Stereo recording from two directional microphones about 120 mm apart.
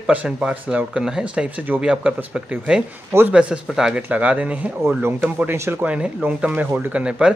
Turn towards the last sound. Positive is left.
turn(degrees=-10)  # may be behind; listen again after turning